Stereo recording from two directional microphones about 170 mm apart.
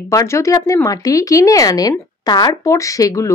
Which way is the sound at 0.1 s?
20° left (ahead or behind).